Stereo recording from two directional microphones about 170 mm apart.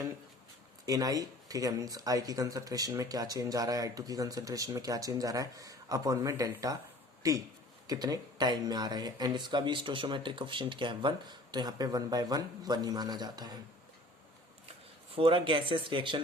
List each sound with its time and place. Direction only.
0.9 s speech: 20° right (ahead or behind)
15.1 s speech: 30° right (ahead or behind)